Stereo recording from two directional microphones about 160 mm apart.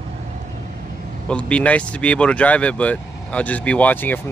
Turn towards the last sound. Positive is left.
turn(degrees=10)  # may be behind; listen again after turning